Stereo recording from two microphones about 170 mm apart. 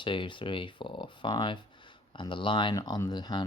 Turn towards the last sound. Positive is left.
turn(degrees=25)  # may be behind; listen again after turning